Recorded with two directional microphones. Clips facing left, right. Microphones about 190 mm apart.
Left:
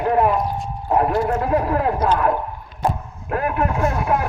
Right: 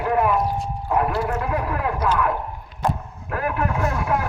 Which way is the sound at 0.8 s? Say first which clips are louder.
Left 3 dB; 30° left (ahead or behind).